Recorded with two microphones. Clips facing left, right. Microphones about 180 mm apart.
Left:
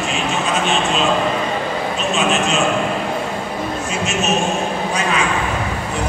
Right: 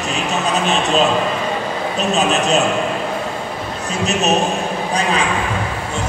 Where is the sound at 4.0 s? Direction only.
35° right (ahead or behind).